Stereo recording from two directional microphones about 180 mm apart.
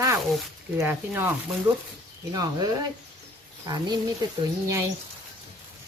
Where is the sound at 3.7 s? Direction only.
20° right (ahead or behind).